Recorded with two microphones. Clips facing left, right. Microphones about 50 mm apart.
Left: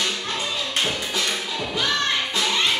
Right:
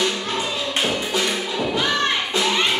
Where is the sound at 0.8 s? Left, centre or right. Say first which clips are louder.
Right 3 dB; centre.